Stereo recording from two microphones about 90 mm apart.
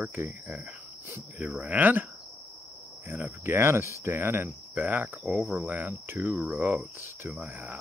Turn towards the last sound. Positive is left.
turn(degrees=-25)  # may be behind; listen again after turning